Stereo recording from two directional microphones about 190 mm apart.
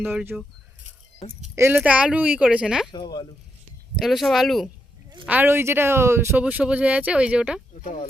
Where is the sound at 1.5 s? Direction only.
10° right (ahead or behind).